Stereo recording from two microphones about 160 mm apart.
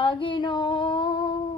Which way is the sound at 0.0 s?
30° left (ahead or behind).